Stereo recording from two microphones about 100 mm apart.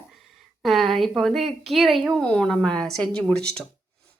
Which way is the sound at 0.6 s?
Centre (ahead or behind).